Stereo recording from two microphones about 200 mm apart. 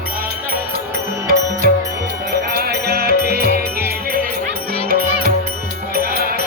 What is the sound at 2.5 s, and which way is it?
Music, 50° right (ahead or behind).